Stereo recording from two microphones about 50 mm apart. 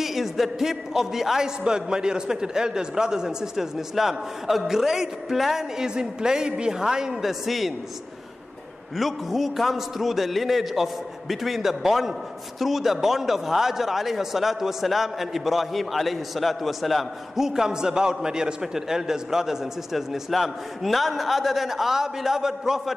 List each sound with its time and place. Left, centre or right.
0.0 s a man's voice: centre
8.9 s a man's voice: centre